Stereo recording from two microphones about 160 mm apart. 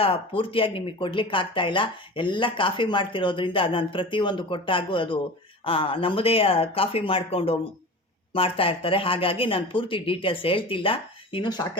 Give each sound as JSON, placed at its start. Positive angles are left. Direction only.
{"t": 0.0, "sound": "speech", "side_deg": 35}